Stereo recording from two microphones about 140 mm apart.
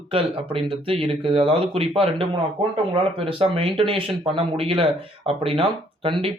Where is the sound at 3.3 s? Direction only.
40° right (ahead or behind).